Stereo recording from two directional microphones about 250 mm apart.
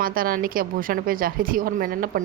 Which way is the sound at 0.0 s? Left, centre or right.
Right.